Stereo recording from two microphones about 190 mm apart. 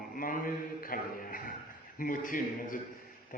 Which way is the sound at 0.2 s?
45° left (ahead or behind).